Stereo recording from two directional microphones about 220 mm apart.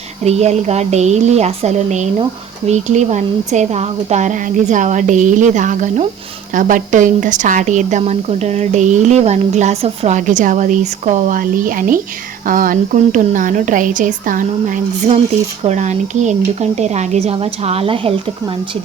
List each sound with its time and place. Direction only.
0.3 s a woman's voice: 30° right (ahead or behind)